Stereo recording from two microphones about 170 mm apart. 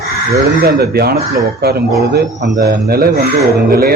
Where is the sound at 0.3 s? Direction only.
65° right (ahead or behind).